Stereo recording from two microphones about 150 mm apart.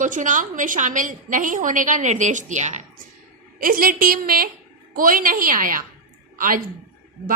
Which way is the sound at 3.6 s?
70° right (ahead or behind).